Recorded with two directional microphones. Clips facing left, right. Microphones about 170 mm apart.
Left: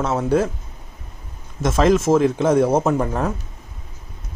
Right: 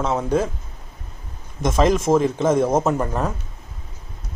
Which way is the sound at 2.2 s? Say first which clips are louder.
Left 2 dB; 10° left (ahead or behind).